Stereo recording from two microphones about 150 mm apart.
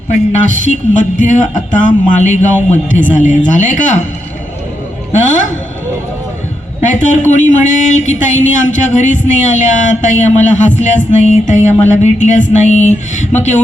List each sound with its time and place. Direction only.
0.1 s speech: 55° left (ahead or behind)
5.1 s speech: 55° left (ahead or behind)
6.8 s a man's voice: 55° left (ahead or behind)